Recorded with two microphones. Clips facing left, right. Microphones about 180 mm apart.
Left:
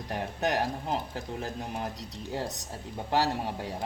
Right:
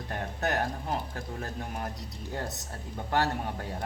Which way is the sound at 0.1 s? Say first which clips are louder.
Left 2 dB; 20° left (ahead or behind).